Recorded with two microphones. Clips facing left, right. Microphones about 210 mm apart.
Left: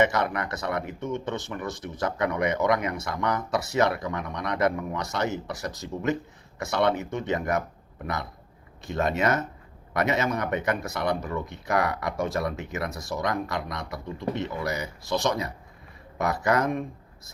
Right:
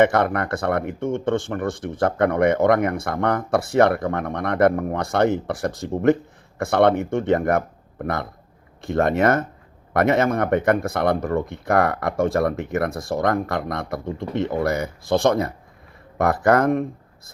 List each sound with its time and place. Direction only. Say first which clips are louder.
0.0 s speech: right 6 dB; 55° right (ahead or behind)